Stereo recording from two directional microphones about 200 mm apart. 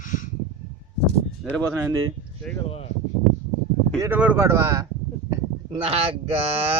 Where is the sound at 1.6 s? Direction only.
15° right (ahead or behind).